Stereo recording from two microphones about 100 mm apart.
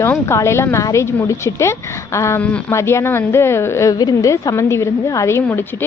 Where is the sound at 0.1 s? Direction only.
25° left (ahead or behind).